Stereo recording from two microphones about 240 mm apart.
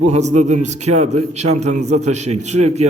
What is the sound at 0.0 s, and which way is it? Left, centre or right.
A man's voice, right.